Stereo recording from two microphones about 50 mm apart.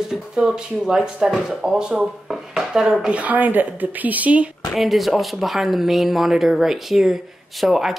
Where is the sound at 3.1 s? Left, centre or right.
Right.